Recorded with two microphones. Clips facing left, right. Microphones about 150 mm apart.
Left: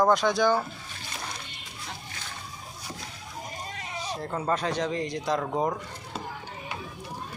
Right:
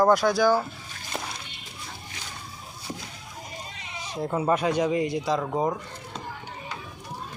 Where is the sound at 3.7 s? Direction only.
45° left (ahead or behind).